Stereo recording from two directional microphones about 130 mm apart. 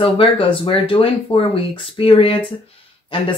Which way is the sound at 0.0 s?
45° left (ahead or behind).